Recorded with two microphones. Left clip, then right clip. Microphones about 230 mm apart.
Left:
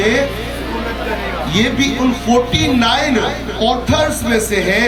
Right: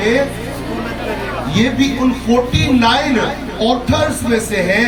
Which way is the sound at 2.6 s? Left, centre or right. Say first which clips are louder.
Right 1 dB; left.